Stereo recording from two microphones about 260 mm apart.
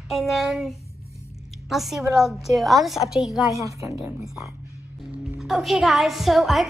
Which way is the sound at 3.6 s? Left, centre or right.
Centre.